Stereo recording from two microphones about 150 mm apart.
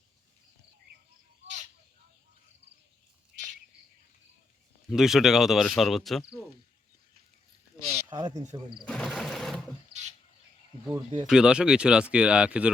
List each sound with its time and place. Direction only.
4.9 s speech: centre (ahead or behind)
7.8 s a sound: 5° right (ahead or behind)
8.1 s speech: 30° right (ahead or behind)
8.9 s sewing machine: 5° left (ahead or behind)
9.9 s bird: 90° right
10.9 s speech: 25° right (ahead or behind)
11.3 s speech: 5° right (ahead or behind)